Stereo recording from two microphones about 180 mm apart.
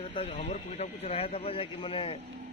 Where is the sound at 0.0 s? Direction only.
30° left (ahead or behind).